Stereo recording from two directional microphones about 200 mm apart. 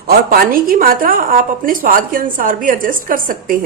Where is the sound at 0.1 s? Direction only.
50° right (ahead or behind).